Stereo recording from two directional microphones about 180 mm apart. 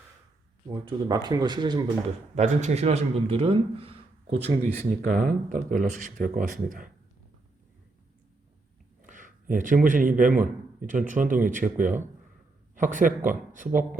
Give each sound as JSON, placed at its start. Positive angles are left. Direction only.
{"t": 0.7, "sound": "speech", "side_deg": -25}
{"t": 2.3, "sound": "a man's voice", "side_deg": -40}
{"t": 5.0, "sound": "speech", "side_deg": -50}
{"t": 9.0, "sound": "a man's voice", "side_deg": -45}